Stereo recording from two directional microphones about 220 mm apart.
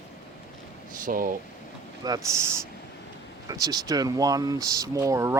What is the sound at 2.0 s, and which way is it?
Speech, 15° right (ahead or behind).